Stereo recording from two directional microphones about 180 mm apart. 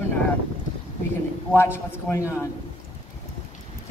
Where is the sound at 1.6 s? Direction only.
15° left (ahead or behind).